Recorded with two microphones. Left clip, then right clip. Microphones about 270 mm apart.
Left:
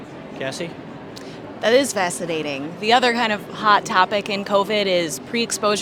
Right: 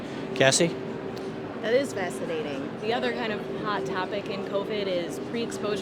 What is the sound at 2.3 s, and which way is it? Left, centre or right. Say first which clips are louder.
Speech: left 6 dB; left.